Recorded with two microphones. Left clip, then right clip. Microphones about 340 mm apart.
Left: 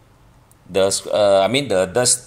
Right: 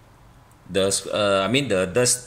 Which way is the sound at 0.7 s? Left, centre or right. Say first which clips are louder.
Left 5 dB; centre.